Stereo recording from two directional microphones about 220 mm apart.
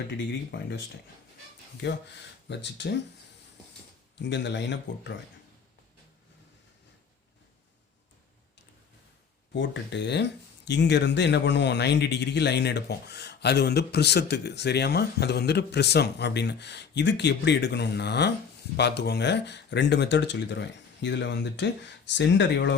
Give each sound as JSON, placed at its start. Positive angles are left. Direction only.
{"t": 2.5, "sound": "a man's voice", "side_deg": 50}
{"t": 4.2, "sound": "a man's voice", "side_deg": 55}
{"t": 9.6, "sound": "a man's voice", "side_deg": 50}